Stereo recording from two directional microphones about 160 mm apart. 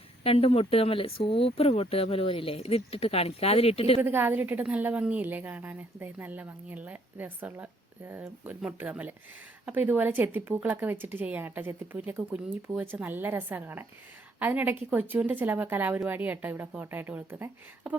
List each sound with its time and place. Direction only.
0.3 s speech: 40° left (ahead or behind)
4.0 s a woman's voice: 15° right (ahead or behind)